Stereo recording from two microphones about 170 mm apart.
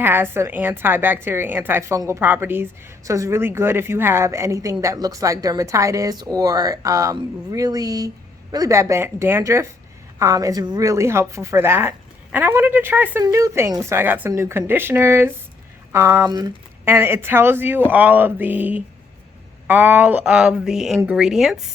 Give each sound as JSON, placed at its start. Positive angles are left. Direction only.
{"t": 0.0, "sound": "a woman's voice", "side_deg": -15}